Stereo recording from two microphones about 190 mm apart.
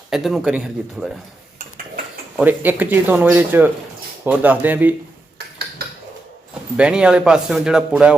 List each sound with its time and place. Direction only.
0.1 s speech: centre (ahead or behind)
2.3 s speech: 10° right (ahead or behind)
5.8 s a sound: 55° right (ahead or behind)
6.7 s speech: 5° right (ahead or behind)